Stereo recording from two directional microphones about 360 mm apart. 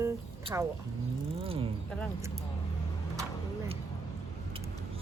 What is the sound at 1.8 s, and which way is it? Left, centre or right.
Speech, centre.